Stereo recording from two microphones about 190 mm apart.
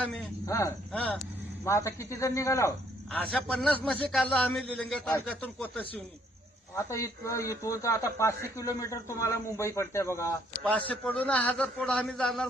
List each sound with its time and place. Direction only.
0.4 s a man's voice: 15° left (ahead or behind)